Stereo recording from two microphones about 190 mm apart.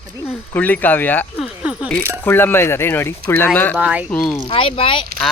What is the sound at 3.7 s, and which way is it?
Speech, 5° right (ahead or behind).